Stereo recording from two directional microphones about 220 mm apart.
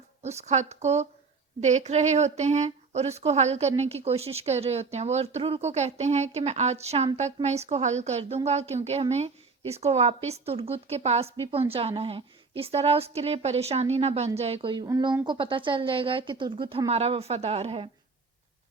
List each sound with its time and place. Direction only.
0.2 s a woman's voice: 30° right (ahead or behind)